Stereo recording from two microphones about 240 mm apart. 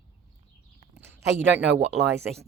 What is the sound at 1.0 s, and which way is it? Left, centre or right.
Speech, centre.